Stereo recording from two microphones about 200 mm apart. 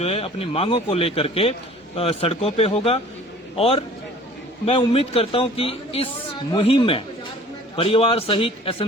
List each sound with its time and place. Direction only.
0.0 s a man's voice: 30° left (ahead or behind)